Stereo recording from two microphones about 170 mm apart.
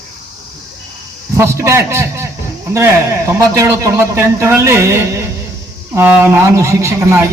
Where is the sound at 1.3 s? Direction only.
15° right (ahead or behind).